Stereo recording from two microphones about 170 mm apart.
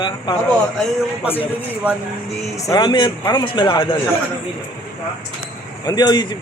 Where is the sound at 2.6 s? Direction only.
20° left (ahead or behind).